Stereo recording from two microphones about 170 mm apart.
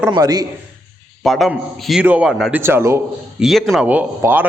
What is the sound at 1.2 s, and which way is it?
A man's voice, centre (ahead or behind).